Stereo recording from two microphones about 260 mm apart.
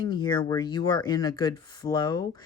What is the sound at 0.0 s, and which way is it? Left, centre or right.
A woman's voice, centre.